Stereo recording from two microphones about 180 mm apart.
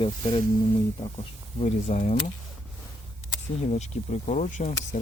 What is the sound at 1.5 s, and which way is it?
Speech, 40° left (ahead or behind).